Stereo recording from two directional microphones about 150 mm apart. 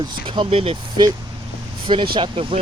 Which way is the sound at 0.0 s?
30° right (ahead or behind).